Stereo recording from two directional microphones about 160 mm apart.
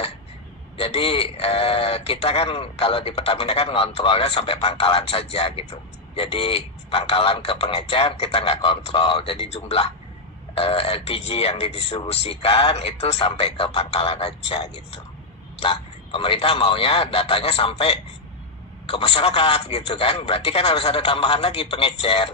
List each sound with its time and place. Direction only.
0.7 s speech: 35° left (ahead or behind)